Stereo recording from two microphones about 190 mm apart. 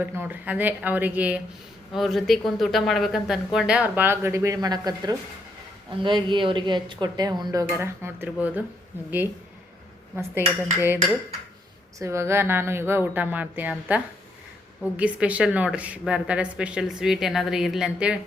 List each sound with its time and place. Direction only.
0.0 s a woman's voice: 10° right (ahead or behind)